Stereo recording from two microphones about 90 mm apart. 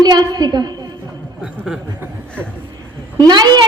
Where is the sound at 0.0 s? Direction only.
50° right (ahead or behind).